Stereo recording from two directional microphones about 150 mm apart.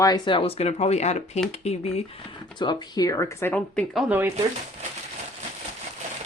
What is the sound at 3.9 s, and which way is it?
Speech, 10° right (ahead or behind).